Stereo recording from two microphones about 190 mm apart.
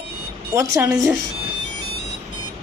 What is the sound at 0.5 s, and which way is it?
Speech, 15° right (ahead or behind).